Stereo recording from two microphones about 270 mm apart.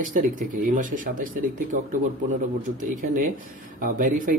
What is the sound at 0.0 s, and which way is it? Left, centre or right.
Speech, right.